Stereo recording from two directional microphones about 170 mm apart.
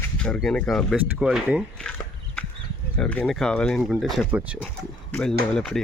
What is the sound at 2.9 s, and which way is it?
Speech, 5° left (ahead or behind).